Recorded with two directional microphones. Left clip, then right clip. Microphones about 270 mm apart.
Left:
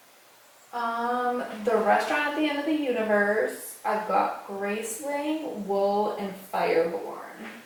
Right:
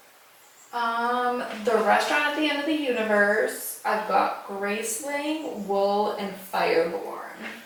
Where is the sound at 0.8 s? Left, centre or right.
Centre.